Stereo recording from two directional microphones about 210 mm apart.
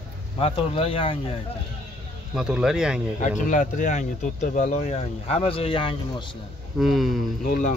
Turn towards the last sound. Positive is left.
turn(degrees=40)  # may be behind; listen again after turning